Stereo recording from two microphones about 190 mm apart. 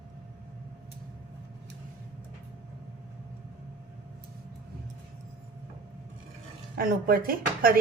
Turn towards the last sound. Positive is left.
turn(degrees=-50)  # may be behind; listen again after turning